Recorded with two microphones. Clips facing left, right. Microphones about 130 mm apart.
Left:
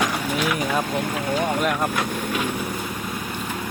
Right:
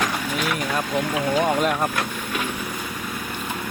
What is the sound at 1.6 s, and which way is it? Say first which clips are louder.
Speech: even; centre (ahead or behind).